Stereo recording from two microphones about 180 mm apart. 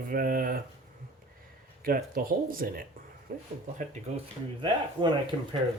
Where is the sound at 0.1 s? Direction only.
55° right (ahead or behind).